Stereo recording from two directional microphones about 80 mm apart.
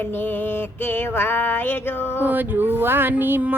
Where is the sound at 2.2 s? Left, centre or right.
Right.